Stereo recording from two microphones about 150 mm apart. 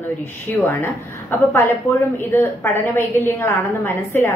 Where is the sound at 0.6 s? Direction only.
15° left (ahead or behind).